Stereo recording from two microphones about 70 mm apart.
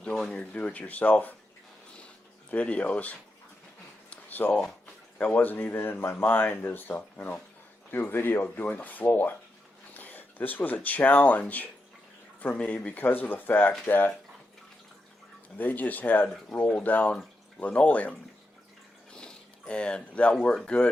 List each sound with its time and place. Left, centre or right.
0.2 s speech: centre
2.5 s speech: centre
4.1 s a sound: left
5.1 s speech: left
15.5 s speech: left
19.1 s a sound: centre
20.3 s speech: centre